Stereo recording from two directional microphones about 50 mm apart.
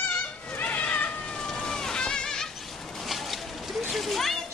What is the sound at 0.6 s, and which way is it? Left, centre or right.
Cat, left.